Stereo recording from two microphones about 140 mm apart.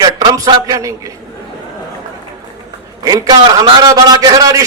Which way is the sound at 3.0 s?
30° right (ahead or behind).